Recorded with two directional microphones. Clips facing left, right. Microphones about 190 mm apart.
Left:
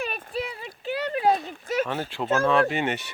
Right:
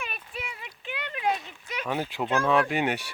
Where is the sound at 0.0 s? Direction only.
40° left (ahead or behind).